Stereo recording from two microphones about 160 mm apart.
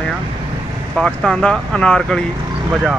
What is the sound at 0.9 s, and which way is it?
Speech, 5° left (ahead or behind).